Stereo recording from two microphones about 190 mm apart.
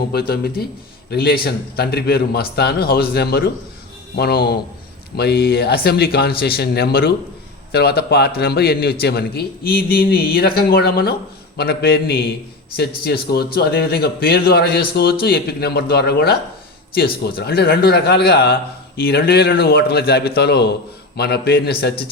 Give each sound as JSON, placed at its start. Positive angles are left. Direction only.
{"t": 0.1, "sound": "a man's voice", "side_deg": 55}
{"t": 13.3, "sound": "a man's voice", "side_deg": 55}